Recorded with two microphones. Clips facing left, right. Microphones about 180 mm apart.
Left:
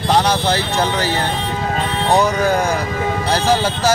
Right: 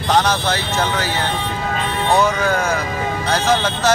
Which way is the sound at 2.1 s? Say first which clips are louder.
Left 2 dB; 35° left (ahead or behind).